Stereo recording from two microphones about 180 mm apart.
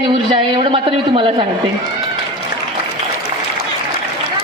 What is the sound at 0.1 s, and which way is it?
A man's voice, 30° right (ahead or behind).